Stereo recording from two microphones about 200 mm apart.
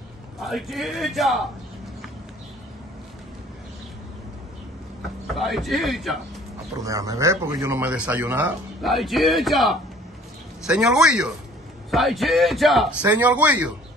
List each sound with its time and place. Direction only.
0.4 s speech: centre (ahead or behind)
5.3 s speech: centre (ahead or behind)
6.8 s speech: 15° right (ahead or behind)